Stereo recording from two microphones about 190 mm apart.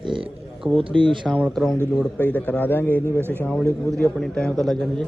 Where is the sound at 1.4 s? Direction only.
5° right (ahead or behind).